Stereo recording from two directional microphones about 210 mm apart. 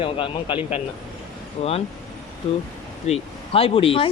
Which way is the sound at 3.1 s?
25° left (ahead or behind).